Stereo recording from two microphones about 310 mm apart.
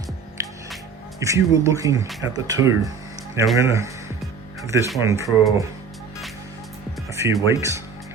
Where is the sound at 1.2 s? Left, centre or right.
Centre.